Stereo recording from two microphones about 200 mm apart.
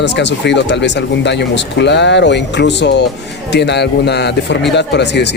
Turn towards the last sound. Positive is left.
turn(degrees=60)  # may be behind; listen again after turning